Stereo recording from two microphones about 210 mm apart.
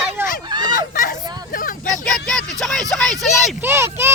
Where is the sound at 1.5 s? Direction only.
40° left (ahead or behind).